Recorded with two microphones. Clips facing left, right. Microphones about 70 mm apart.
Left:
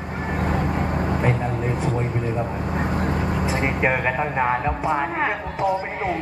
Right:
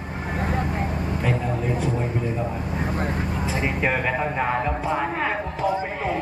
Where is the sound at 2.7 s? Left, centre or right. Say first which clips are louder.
Left 4 dB; left.